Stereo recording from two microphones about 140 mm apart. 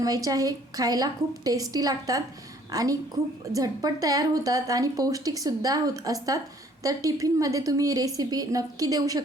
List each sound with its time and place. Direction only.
0.0 s a woman's voice: 25° right (ahead or behind)